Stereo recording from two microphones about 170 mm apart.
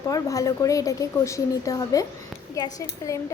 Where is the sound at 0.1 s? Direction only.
20° left (ahead or behind).